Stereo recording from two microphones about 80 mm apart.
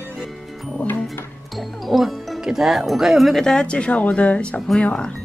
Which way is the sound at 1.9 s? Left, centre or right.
Centre.